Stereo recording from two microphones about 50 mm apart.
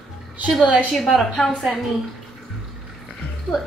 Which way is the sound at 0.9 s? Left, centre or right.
Centre.